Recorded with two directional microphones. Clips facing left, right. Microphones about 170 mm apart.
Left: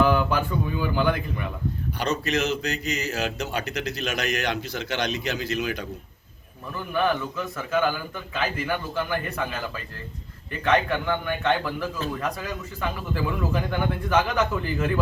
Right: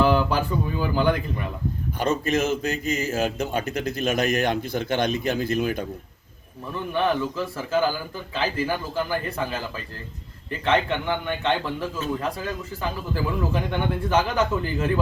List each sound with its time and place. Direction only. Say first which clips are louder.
0.0 s a sound: right 1 dB; 30° right (ahead or behind)
0.8 s a man's voice: right 2 dB; 35° right (ahead or behind)
2.0 s a man's voice: right 3 dB; 50° right (ahead or behind)
6.9 s a man's voice: right 1 dB; 30° right (ahead or behind)
10.7 s a man's voice: even; 25° right (ahead or behind)